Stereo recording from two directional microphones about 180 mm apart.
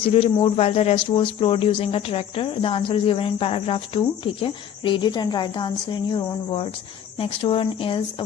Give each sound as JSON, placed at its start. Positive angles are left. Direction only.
{"t": 0.3, "sound": "speech", "side_deg": 30}